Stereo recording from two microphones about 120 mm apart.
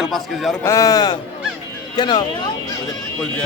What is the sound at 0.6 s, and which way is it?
A man's voice, 25° left (ahead or behind).